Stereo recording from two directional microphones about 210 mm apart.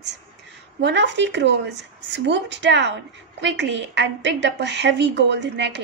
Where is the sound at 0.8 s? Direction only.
55° right (ahead or behind).